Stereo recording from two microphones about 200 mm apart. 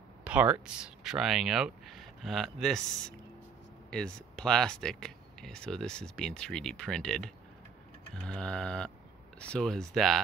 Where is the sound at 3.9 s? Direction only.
5° left (ahead or behind).